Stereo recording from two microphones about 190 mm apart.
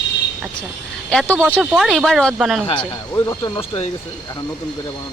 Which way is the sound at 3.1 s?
20° left (ahead or behind).